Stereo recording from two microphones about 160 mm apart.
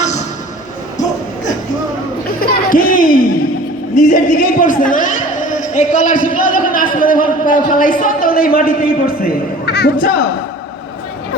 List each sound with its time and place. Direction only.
2.4 s a man's voice: 65° left (ahead or behind); by 10.1 s 90° left